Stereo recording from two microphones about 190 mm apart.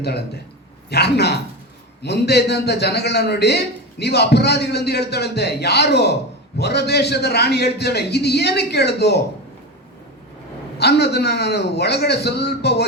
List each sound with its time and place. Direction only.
0.9 s a man's voice: 60° left (ahead or behind)
10.8 s a man's voice: 60° left (ahead or behind)